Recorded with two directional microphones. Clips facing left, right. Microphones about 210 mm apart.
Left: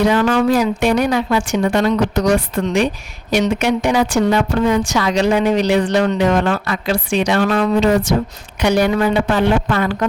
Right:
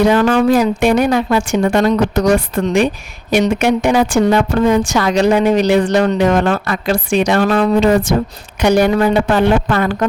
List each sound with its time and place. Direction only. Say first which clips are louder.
0.0 s a woman's voice: right 3 dB; 50° right (ahead or behind)
7.8 s a woman's voice: right 2 dB; 50° right (ahead or behind)